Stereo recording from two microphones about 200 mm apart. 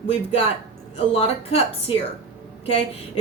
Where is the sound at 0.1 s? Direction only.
30° left (ahead or behind).